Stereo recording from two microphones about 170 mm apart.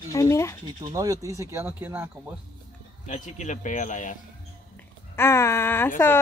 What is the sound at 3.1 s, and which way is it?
Speech, 45° left (ahead or behind).